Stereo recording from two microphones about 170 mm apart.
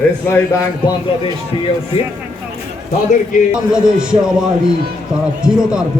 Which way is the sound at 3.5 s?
5° right (ahead or behind).